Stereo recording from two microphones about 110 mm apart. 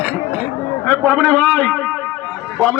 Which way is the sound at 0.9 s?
15° left (ahead or behind).